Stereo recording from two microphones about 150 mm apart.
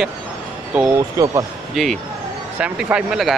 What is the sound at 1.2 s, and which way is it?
Speech, 25° right (ahead or behind).